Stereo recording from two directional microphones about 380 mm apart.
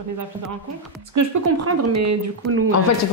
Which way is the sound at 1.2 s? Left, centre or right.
Right.